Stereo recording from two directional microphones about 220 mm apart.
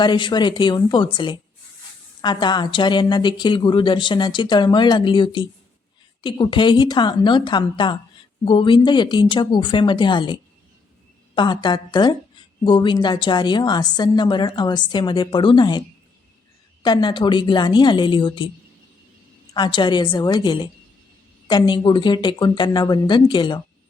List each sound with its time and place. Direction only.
0.0 s a woman's voice: 20° left (ahead or behind)
11.3 s a woman's voice: 20° left (ahead or behind)
16.8 s a woman's voice: 20° left (ahead or behind)
19.5 s a woman's voice: 20° left (ahead or behind)